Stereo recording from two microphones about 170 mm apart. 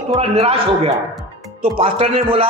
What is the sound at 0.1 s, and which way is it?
A man's voice, 35° right (ahead or behind).